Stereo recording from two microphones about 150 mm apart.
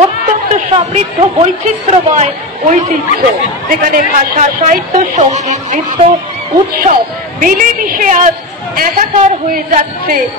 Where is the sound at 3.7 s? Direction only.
65° right (ahead or behind).